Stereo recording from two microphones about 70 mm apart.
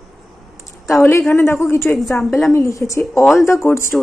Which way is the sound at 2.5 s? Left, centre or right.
Left.